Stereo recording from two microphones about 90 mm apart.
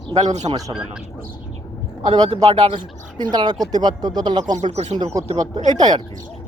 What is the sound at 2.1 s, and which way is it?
Speech, 50° right (ahead or behind).